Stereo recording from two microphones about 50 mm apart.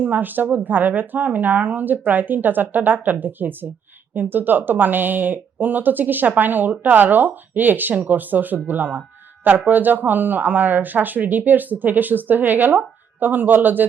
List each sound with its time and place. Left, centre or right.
0.0 s speech: right